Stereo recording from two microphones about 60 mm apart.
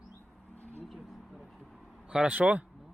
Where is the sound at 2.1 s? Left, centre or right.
Right.